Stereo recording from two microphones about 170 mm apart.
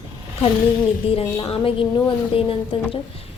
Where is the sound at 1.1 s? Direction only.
35° left (ahead or behind).